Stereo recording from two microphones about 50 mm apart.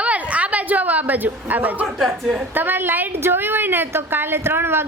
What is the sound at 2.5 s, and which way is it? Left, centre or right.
A woman's voice, right.